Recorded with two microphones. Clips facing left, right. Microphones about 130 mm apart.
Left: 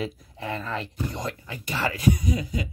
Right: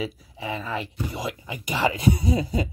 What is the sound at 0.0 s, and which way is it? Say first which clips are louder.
Speech: right 1 dB; 5° right (ahead or behind).